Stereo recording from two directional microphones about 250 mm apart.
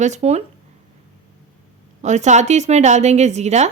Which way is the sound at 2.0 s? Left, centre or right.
Right.